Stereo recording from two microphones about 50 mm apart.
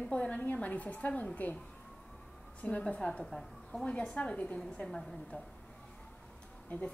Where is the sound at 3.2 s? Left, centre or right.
Centre.